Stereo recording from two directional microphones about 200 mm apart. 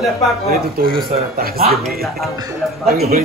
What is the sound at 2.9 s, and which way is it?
Speech, 45° right (ahead or behind).